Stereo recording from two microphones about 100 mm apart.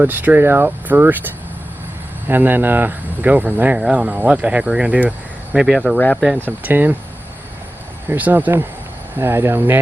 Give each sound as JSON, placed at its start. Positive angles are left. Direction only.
{"t": 0.0, "sound": "speech", "side_deg": -20}
{"t": 6.4, "sound": "speech", "side_deg": -20}
{"t": 8.0, "sound": "speech", "side_deg": -20}